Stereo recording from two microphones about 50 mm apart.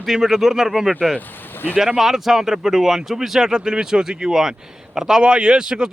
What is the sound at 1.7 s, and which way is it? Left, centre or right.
Speech, centre.